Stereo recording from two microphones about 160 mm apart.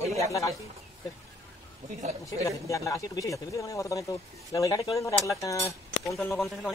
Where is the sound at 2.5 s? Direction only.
20° left (ahead or behind).